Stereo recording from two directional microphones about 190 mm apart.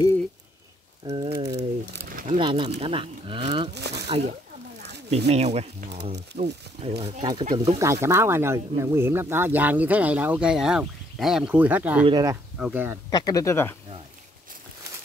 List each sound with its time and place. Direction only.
1.0 s a sound: 20° right (ahead or behind)
2.0 s a sound: 50° right (ahead or behind)
2.3 s speech: 25° right (ahead or behind)
3.7 s crumpling: 60° right (ahead or behind)
5.1 s speech: 35° right (ahead or behind)
7.5 s speech: 25° right (ahead or behind)
12.0 s speech: 20° right (ahead or behind)
12.5 s speech: 5° right (ahead or behind)
13.1 s speech: 20° left (ahead or behind)